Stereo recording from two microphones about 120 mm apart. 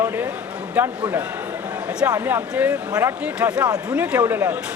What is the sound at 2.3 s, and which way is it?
Speech, 15° right (ahead or behind).